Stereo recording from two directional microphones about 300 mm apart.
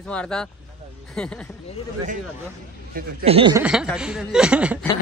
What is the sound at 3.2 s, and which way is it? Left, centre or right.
Speech, centre.